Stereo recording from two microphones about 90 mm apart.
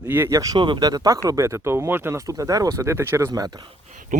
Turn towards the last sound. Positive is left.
turn(degrees=-45)  # may be behind; listen again after turning